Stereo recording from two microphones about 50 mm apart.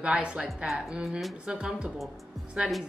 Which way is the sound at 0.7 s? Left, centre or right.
Centre.